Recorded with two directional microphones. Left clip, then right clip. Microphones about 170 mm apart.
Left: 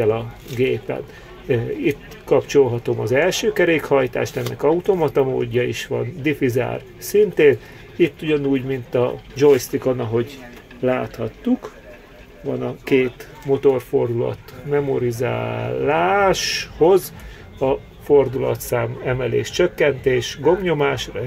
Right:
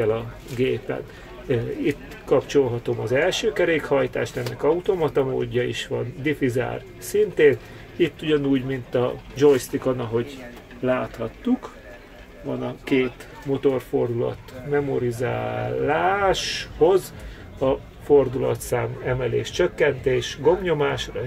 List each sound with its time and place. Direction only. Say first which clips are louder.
0.0 s speech: left 4 dB; 15° left (ahead or behind)
8.0 s speech: left 3 dB; 15° left (ahead or behind)
13.5 s speech: left 5 dB; 20° left (ahead or behind)
17.6 s speech: left 2 dB; 15° left (ahead or behind)